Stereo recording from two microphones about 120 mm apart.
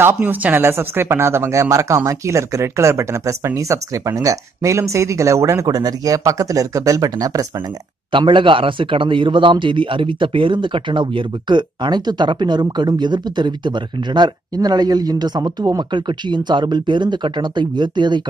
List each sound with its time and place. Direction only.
0.0 s speech: 15° right (ahead or behind)
8.1 s a man's voice: 45° right (ahead or behind)